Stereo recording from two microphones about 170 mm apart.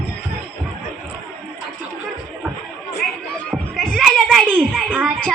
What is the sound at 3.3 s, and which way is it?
Children playing, 5° left (ahead or behind).